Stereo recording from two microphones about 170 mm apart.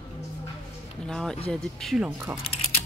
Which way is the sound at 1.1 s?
5° left (ahead or behind).